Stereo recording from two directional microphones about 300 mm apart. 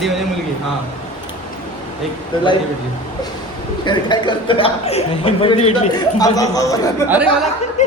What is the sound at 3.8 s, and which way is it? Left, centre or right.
Speech, centre.